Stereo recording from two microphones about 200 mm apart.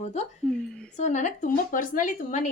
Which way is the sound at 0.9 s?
35° left (ahead or behind).